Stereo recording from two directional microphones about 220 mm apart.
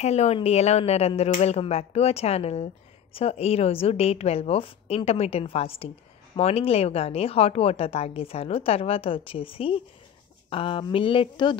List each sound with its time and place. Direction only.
0.0 s a woman's voice: 30° left (ahead or behind)